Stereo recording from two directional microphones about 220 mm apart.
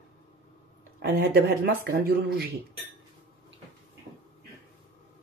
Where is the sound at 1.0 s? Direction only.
50° right (ahead or behind).